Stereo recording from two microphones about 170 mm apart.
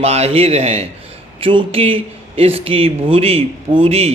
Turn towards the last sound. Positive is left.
turn(degrees=-35)  # may be behind; listen again after turning